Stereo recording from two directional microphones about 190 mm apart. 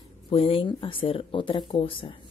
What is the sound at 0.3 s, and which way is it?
Speech, 30° left (ahead or behind).